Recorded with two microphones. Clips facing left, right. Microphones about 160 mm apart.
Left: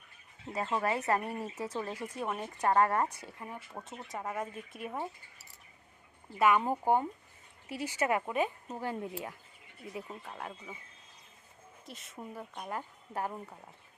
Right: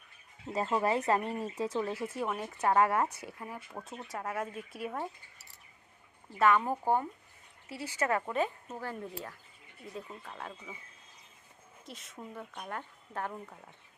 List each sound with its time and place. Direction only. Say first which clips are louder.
0.6 s speech: right 2 dB; 10° right (ahead or behind)
1.2 s speech: right 2 dB; 10° left (ahead or behind)
1.9 s speech: right 2 dB; 10° right (ahead or behind)
3.4 s speech: even; centre (ahead or behind)
6.4 s speech: even; 15° left (ahead or behind)
11.9 s speech: left 1 dB; centre (ahead or behind)